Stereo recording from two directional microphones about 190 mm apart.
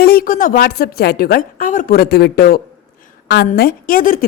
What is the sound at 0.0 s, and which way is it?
A woman's voice, 50° left (ahead or behind).